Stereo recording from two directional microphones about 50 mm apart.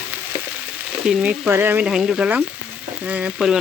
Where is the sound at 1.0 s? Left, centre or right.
Centre.